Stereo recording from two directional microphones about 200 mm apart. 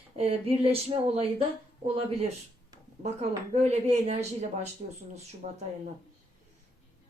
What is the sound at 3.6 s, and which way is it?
Speech, 35° right (ahead or behind).